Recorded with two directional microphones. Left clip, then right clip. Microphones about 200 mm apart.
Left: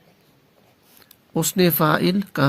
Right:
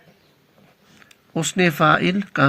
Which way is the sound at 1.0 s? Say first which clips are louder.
Left 1 dB; 50° left (ahead or behind).